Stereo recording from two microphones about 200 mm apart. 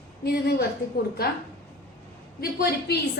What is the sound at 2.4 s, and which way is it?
Speech, 50° left (ahead or behind).